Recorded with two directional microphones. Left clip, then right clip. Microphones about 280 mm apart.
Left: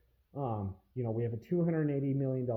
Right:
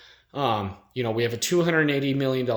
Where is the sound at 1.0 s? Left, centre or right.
Centre.